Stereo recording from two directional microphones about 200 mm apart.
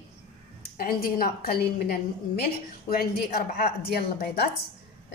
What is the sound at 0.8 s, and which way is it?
A woman's voice, 45° left (ahead or behind).